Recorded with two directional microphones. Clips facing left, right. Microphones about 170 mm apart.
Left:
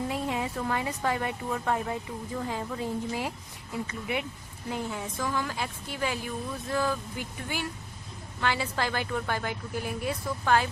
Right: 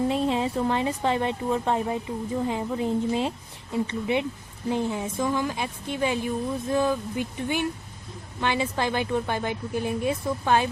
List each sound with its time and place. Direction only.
0.1 s speech: 25° right (ahead or behind)